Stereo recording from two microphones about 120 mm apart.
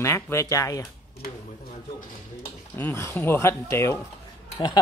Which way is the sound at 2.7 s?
20° left (ahead or behind).